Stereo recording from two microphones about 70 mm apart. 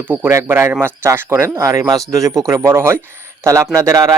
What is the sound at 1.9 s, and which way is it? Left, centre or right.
Speech, right.